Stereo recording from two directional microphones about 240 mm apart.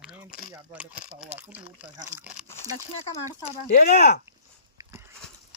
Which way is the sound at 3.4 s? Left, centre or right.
Left.